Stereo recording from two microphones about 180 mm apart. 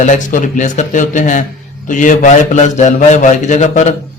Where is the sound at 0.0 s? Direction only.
45° left (ahead or behind).